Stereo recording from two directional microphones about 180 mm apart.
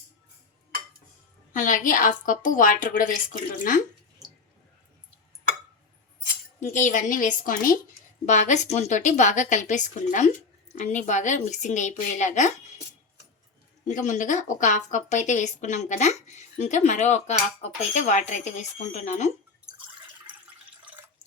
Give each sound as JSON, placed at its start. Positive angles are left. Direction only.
{"t": 1.5, "sound": "a woman's voice", "side_deg": 45}
{"t": 6.6, "sound": "a woman's voice", "side_deg": 45}
{"t": 13.8, "sound": "a woman's voice", "side_deg": 45}